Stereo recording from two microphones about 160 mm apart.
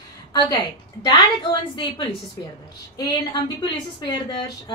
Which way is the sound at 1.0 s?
30° left (ahead or behind).